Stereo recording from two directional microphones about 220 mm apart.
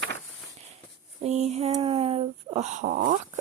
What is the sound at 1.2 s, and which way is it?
Speech, 30° right (ahead or behind).